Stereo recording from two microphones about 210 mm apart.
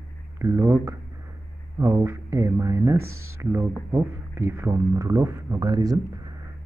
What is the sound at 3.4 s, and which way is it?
Speech, 10° right (ahead or behind).